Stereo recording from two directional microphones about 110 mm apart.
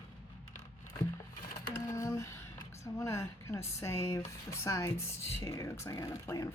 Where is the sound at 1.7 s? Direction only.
25° left (ahead or behind).